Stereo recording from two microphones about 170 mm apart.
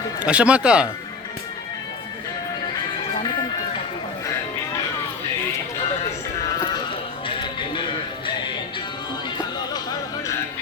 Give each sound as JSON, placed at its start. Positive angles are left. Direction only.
{"t": 0.3, "sound": "speech", "side_deg": -5}
{"t": 7.3, "sound": "music", "side_deg": 30}